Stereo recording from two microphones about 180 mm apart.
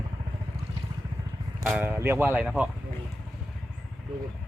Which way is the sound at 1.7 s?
10° right (ahead or behind).